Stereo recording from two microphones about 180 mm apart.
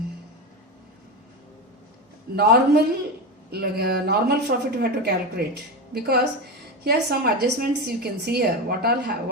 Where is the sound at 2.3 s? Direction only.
60° right (ahead or behind).